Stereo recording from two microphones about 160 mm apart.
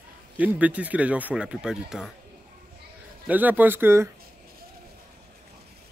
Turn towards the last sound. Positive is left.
turn(degrees=-15)  # may be behind; listen again after turning